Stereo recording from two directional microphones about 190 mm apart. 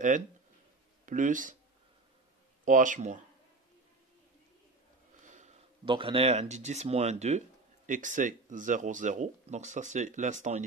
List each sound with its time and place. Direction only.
1.0 s speech: 40° right (ahead or behind)
2.6 s speech: 40° right (ahead or behind)
5.2 s sniff: 40° right (ahead or behind)
5.9 s speech: 25° right (ahead or behind)